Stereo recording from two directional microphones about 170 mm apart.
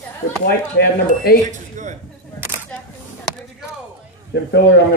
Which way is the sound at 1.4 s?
45° right (ahead or behind).